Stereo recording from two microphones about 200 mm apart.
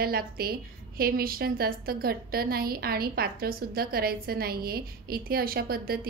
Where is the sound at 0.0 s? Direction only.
50° right (ahead or behind).